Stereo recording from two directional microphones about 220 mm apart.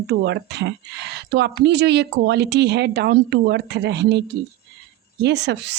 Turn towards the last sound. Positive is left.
turn(degrees=-50)  # may be behind; listen again after turning